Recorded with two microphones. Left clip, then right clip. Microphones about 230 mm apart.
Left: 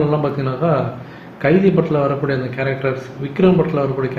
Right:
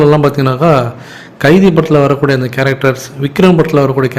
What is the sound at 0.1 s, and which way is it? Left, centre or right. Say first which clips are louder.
Speech: right 9 dB; right.